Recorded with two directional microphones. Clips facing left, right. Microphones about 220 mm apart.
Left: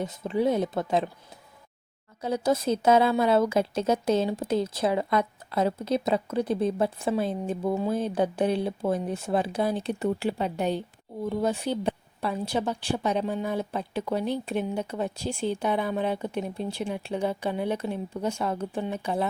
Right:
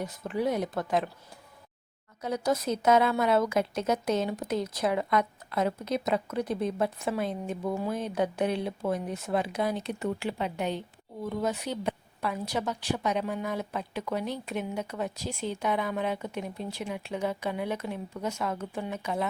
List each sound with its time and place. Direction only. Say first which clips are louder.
0.0 s a woman's voice: left 4 dB; 25° left (ahead or behind)
2.2 s a woman's voice: left 3 dB; 30° left (ahead or behind)